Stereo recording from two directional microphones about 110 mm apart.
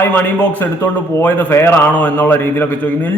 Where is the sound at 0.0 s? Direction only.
20° left (ahead or behind).